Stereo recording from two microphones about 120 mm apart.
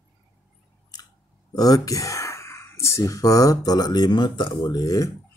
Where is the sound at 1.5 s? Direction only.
30° left (ahead or behind).